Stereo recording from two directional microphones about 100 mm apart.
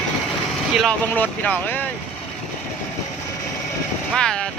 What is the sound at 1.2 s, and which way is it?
Speech, 15° left (ahead or behind).